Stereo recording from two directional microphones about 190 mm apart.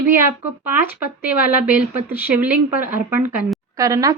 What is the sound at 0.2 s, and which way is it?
A woman's voice, 10° right (ahead or behind).